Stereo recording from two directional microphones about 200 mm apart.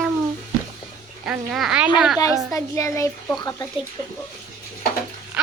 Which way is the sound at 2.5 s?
15° left (ahead or behind).